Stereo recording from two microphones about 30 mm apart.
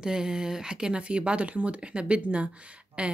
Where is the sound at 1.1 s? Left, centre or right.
Right.